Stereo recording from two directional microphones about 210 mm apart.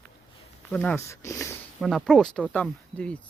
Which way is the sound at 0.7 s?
10° left (ahead or behind).